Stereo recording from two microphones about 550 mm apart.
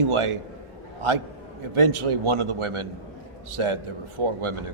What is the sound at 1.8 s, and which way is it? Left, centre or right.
A man's voice, right.